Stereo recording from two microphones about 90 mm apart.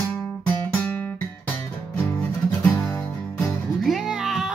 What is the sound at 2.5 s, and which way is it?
Music, 30° left (ahead or behind).